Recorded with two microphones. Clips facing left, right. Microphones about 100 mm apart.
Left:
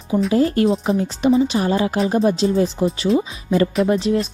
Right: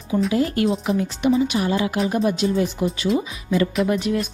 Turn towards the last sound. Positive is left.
turn(degrees=30)  # may be behind; listen again after turning